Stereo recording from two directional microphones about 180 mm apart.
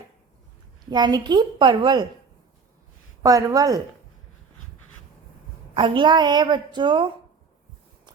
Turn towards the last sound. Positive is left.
turn(degrees=-25)  # may be behind; listen again after turning